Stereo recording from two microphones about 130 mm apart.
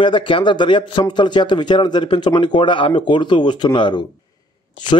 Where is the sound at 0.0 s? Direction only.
40° left (ahead or behind).